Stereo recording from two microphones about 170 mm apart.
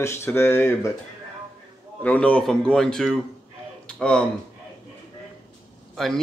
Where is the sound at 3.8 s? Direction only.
5° left (ahead or behind).